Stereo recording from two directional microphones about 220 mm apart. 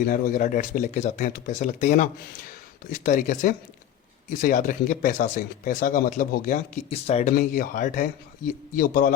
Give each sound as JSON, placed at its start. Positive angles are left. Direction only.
{"t": 0.0, "sound": "speech", "side_deg": 40}
{"t": 7.3, "sound": "speech", "side_deg": 40}